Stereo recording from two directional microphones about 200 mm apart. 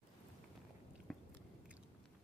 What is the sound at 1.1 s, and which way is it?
Biting, 5° left (ahead or behind).